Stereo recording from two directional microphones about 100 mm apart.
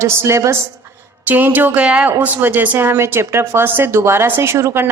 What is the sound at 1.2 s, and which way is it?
A woman's voice, 15° right (ahead or behind).